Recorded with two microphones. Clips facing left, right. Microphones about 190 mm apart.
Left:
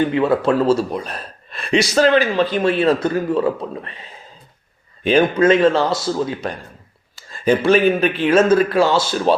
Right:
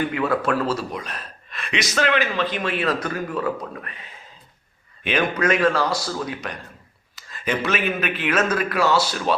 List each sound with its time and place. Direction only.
0.0 s a man's voice: 25° left (ahead or behind)
5.0 s a man's voice: 25° left (ahead or behind)